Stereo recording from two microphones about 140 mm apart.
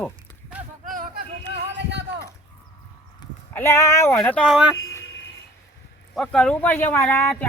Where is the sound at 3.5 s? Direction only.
20° left (ahead or behind).